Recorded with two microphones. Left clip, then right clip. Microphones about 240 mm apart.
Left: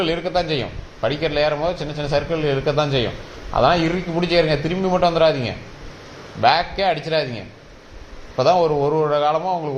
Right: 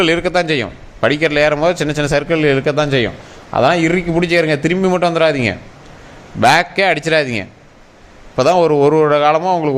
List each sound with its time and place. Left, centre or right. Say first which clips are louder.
0.0 s a man's voice: right 7 dB; right